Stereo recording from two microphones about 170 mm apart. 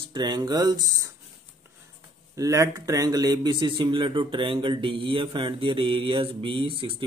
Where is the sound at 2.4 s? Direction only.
20° right (ahead or behind).